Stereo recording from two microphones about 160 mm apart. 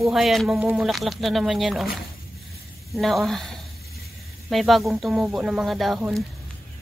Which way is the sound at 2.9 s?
Centre (ahead or behind).